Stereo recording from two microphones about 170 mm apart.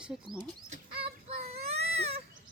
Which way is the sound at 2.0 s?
35° right (ahead or behind).